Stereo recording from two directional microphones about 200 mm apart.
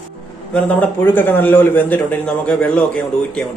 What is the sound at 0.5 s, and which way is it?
A man's voice, 10° left (ahead or behind).